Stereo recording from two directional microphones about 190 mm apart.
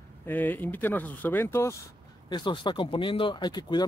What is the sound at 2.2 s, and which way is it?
Speech, 25° left (ahead or behind).